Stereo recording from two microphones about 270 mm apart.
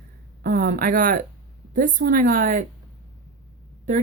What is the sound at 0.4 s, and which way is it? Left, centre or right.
Speech, right.